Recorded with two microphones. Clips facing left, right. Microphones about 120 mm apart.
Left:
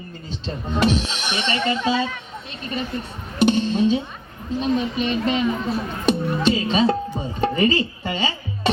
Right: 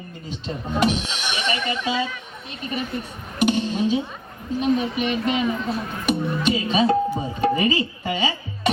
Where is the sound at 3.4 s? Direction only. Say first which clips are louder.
Left 3 dB; 30° left (ahead or behind).